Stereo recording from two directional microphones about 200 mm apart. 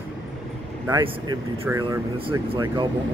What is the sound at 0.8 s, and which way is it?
Speech, 20° right (ahead or behind).